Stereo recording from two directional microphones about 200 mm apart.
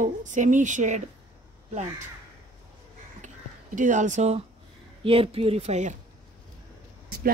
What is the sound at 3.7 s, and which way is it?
Speech, 40° right (ahead or behind).